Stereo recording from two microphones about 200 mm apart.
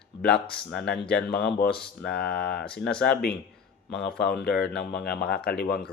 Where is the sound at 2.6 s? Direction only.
5° left (ahead or behind).